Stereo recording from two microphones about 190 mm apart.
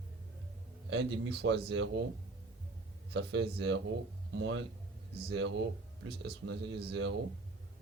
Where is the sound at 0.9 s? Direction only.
70° right (ahead or behind).